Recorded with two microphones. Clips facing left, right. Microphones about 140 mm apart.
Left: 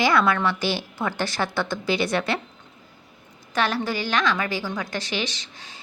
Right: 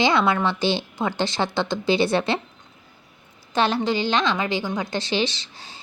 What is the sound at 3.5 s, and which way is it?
A woman's voice, 25° right (ahead or behind).